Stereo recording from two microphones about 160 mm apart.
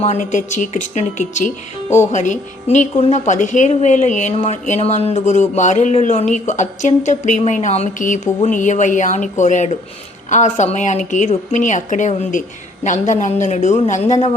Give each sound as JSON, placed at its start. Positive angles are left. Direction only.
{"t": 0.0, "sound": "speech", "side_deg": 45}